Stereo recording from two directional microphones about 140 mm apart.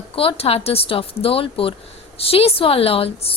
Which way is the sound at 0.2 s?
45° left (ahead or behind).